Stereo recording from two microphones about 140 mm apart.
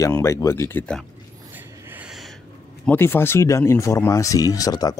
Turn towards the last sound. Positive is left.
turn(degrees=25)  # may be behind; listen again after turning